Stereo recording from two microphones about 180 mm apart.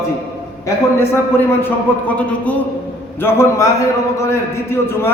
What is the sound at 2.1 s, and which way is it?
A man's voice, 10° left (ahead or behind).